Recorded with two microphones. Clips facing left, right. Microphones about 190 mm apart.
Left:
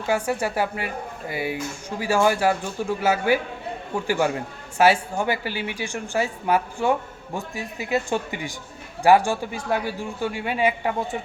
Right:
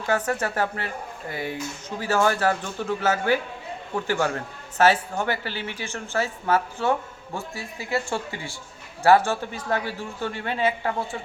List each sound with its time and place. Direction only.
0.1 s a man's voice: 10° left (ahead or behind)